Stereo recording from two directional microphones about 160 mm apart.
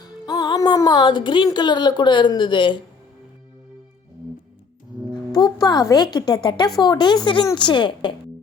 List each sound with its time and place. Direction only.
0.0 s speech: 25° left (ahead or behind)
5.3 s a woman's voice: 25° left (ahead or behind)